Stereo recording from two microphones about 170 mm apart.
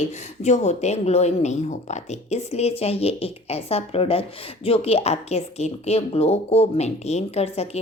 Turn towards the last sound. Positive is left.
turn(degrees=40)  # may be behind; listen again after turning